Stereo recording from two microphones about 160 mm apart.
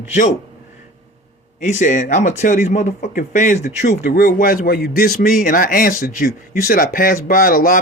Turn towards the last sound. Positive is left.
turn(degrees=60)  # may be behind; listen again after turning